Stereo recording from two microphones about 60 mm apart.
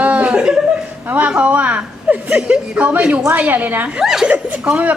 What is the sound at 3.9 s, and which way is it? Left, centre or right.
Speech, centre.